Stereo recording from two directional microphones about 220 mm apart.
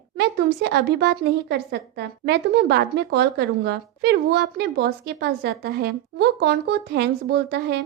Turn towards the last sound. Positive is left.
turn(degrees=-50)  # may be behind; listen again after turning